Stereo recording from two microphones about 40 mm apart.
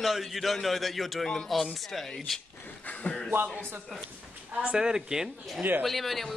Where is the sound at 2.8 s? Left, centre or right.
Left.